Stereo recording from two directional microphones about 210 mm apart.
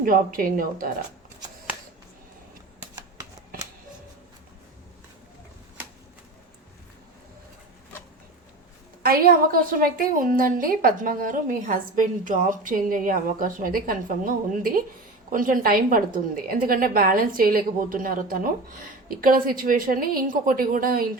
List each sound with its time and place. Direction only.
0.0 s a woman's voice: 40° right (ahead or behind)
9.0 s a woman's voice: 45° right (ahead or behind)